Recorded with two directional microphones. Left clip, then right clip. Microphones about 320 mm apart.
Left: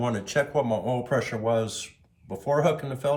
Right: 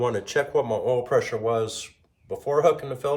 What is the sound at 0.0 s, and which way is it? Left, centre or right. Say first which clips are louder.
A man's voice: right 2 dB; centre.